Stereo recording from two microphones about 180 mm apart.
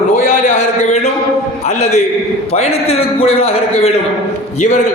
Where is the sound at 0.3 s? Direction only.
40° left (ahead or behind).